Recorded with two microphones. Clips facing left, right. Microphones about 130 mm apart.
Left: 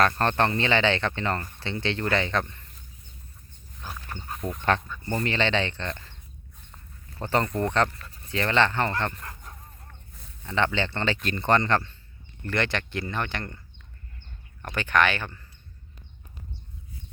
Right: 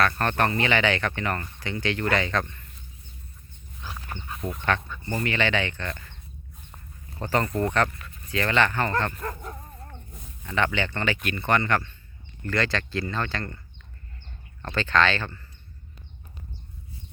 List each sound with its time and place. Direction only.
0.0 s speech: 30° left (ahead or behind)
3.8 s wild animals: 45° left (ahead or behind)
4.4 s speech: centre (ahead or behind)
5.2 s speech: 30° left (ahead or behind)
7.2 s speech: 20° left (ahead or behind)
7.4 s speech: 5° right (ahead or behind)
8.0 s speech: 30° left (ahead or behind)
9.2 s bow-wow: 60° right (ahead or behind)
10.4 s speech: 20° left (ahead or behind)
12.5 s speech: 20° left (ahead or behind)
14.6 s speech: 15° left (ahead or behind)